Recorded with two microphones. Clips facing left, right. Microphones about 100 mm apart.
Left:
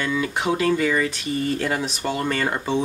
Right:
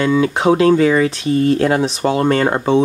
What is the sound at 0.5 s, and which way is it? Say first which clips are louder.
Speech: right 8 dB; 65° right (ahead or behind).